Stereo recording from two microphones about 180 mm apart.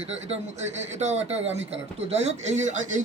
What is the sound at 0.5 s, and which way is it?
Speech, 40° right (ahead or behind).